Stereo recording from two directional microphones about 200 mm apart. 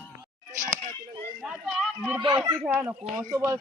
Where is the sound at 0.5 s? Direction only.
40° right (ahead or behind).